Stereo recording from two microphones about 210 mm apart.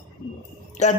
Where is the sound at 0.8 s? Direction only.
35° left (ahead or behind).